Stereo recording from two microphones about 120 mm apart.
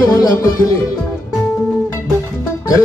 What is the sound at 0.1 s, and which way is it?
Speech, 30° left (ahead or behind).